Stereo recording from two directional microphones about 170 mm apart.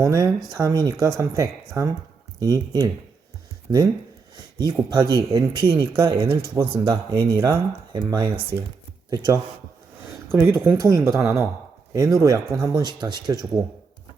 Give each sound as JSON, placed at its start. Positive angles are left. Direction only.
{"t": 0.0, "sound": "speech", "side_deg": -20}
{"t": 6.5, "sound": "speech", "side_deg": -15}
{"t": 10.6, "sound": "speech", "side_deg": -15}